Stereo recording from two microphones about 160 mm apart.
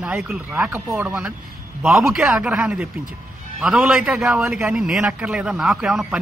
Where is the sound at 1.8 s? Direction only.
Centre (ahead or behind).